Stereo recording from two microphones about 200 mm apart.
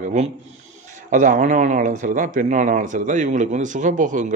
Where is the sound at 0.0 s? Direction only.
35° right (ahead or behind).